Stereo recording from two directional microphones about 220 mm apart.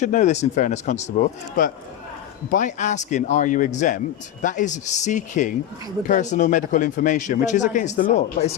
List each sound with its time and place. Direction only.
0.0 s speech: 35° left (ahead or behind)